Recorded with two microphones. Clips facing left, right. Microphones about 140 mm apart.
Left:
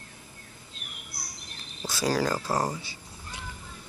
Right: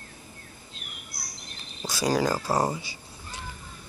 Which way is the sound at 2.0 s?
10° right (ahead or behind).